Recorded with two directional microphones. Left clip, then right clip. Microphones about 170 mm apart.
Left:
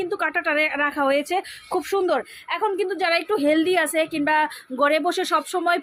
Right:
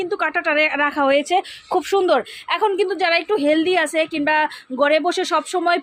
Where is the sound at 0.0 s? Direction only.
15° right (ahead or behind).